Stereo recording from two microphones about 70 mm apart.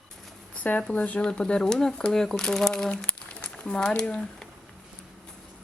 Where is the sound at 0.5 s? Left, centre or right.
Left.